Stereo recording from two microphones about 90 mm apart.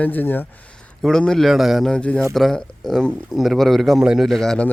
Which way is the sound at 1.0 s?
5° left (ahead or behind).